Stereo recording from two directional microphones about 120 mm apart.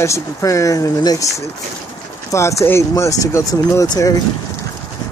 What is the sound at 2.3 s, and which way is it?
Speech, 20° left (ahead or behind).